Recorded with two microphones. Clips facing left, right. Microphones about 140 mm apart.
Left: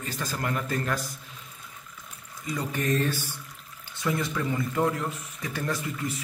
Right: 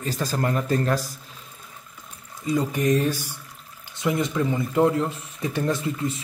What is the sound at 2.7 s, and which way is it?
Speech, 10° right (ahead or behind).